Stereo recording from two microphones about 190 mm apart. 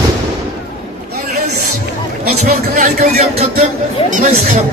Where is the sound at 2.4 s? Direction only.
35° right (ahead or behind).